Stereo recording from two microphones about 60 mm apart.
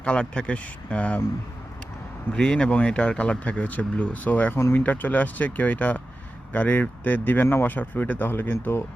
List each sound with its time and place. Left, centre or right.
0.0 s speech: centre
2.3 s speech: centre
4.5 s speech: left
4.8 s speech: left